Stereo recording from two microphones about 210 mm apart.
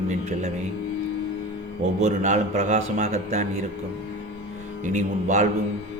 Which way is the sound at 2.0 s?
35° right (ahead or behind).